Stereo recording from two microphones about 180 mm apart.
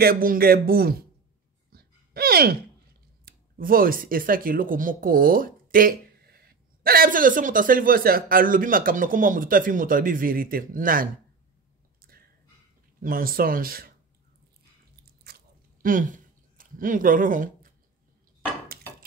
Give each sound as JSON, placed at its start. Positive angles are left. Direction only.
{"t": 0.0, "sound": "speech", "side_deg": -55}
{"t": 1.7, "sound": "a sound", "side_deg": -55}
{"t": 3.3, "sound": "speech", "side_deg": -50}
{"t": 12.1, "sound": "dog", "side_deg": -55}
{"t": 13.0, "sound": "speech", "side_deg": -50}
{"t": 15.8, "sound": "a sound", "side_deg": -50}